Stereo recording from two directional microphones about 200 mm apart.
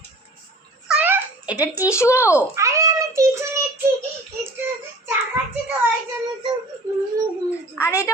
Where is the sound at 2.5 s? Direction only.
15° right (ahead or behind).